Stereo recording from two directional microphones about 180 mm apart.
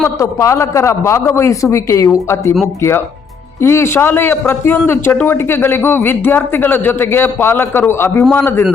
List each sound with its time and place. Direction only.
0.0 s a man's voice: 15° left (ahead or behind)
3.6 s a man's voice: 15° left (ahead or behind)